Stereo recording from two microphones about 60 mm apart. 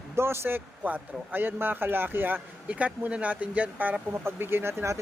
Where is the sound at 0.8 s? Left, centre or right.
Right.